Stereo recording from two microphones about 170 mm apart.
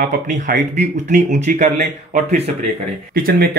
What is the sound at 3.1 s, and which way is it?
Speech, 60° right (ahead or behind).